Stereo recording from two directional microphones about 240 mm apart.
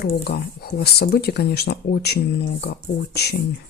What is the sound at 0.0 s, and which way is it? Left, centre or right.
Speech, left.